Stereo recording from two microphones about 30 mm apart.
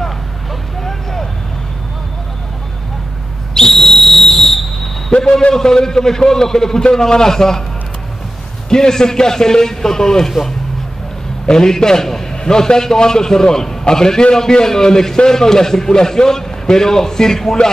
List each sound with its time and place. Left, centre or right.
3.6 s whistle: centre
5.5 s a man's voice: centre
8.6 s a man's voice: left
11.4 s a man's voice: left